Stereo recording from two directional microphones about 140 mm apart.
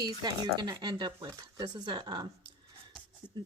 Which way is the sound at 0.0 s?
30° right (ahead or behind).